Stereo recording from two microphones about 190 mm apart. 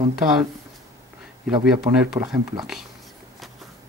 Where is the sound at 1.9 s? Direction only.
20° right (ahead or behind).